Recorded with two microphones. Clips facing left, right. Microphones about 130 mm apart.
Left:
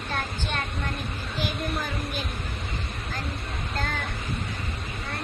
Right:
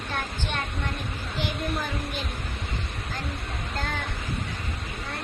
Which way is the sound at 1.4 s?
25° right (ahead or behind).